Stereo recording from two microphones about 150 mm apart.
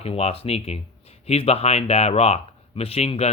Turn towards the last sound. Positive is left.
turn(degrees=45)  # may be behind; listen again after turning